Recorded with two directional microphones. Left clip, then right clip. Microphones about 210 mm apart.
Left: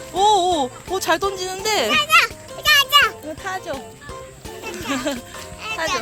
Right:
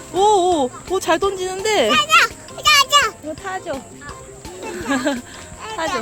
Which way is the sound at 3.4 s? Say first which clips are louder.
Right 1 dB; 5° left (ahead or behind).